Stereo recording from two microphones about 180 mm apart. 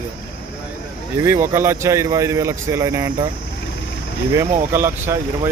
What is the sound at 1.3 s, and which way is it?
Speech, 15° right (ahead or behind).